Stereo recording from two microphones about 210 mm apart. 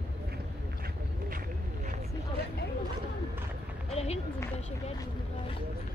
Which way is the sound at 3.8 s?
30° left (ahead or behind).